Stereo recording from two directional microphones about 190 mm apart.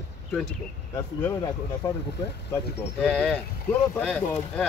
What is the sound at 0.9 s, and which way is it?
Speech, 20° left (ahead or behind).